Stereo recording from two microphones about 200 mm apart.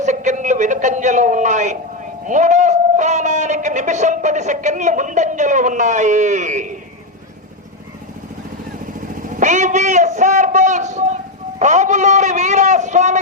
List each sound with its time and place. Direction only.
0.0 s a sound: 35° right (ahead or behind)
2.2 s a man's voice: 35° right (ahead or behind)
9.4 s a man's voice: 35° right (ahead or behind)